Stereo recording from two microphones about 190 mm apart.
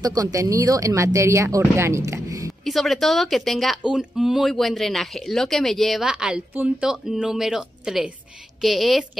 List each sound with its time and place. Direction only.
0.0 s speech: 20° right (ahead or behind)
2.6 s speech: centre (ahead or behind)